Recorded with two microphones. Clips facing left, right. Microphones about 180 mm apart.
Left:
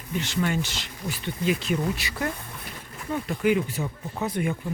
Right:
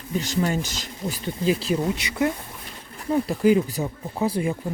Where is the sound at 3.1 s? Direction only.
35° right (ahead or behind).